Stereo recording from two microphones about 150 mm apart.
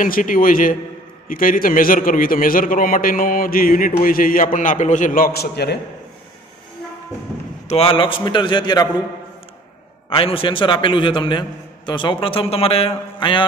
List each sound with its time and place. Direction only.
0.0 s a man's voice: 65° left (ahead or behind); by 5.8 s 90° left
7.6 s a man's voice: 40° left (ahead or behind)
10.0 s a man's voice: 35° left (ahead or behind)